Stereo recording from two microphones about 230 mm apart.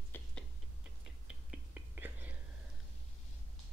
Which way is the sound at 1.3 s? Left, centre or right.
Centre.